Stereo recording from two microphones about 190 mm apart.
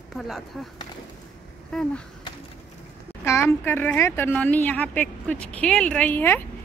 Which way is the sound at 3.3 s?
15° left (ahead or behind).